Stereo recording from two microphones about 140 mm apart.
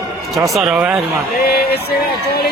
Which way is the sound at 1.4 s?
90° left.